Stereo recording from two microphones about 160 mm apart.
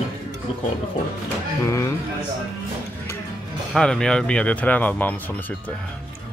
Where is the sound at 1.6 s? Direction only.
20° left (ahead or behind).